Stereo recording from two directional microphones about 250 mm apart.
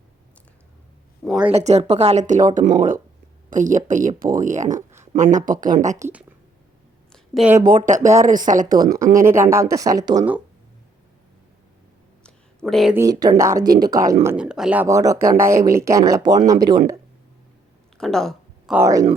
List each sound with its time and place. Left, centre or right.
1.2 s speech: centre
1.5 s speech: right
6.0 s speech: centre
7.1 s a sound: centre
8.2 s speech: right
9.1 s speech: centre
12.6 s speech: centre
17.9 s speech: centre